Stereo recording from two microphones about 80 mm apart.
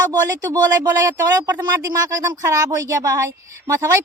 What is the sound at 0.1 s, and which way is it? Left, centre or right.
Speech, right.